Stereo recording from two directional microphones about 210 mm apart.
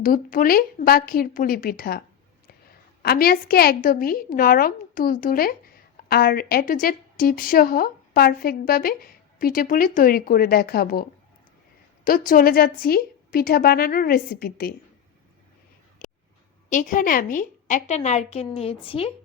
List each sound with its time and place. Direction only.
0.0 s a woman's voice: 40° left (ahead or behind)
3.0 s a woman's voice: 45° left (ahead or behind)
12.0 s a woman's voice: 40° left (ahead or behind)
16.6 s a woman's voice: 35° left (ahead or behind)